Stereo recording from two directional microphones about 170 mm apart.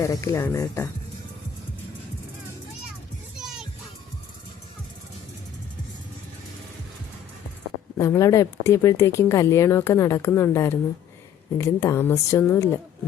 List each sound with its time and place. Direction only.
0.0 s a woman's voice: 15° left (ahead or behind)
7.9 s a woman's voice: 15° left (ahead or behind)